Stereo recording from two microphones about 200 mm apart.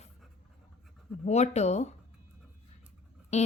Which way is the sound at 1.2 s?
35° left (ahead or behind).